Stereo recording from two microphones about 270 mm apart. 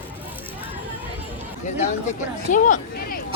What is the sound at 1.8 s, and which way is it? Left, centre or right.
Speech, left.